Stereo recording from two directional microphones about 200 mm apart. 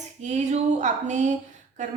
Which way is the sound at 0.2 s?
35° right (ahead or behind).